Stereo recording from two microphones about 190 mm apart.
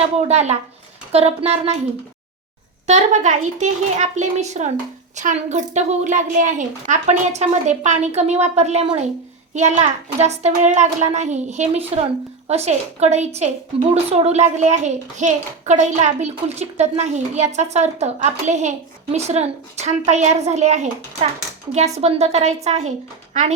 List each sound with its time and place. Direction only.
0.3 s a child's voice: 35° right (ahead or behind)
2.8 s a child's voice: 35° right (ahead or behind)
22.0 s a child's voice: 35° right (ahead or behind)